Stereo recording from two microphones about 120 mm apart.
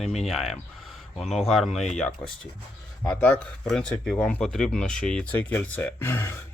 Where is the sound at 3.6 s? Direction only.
5° left (ahead or behind).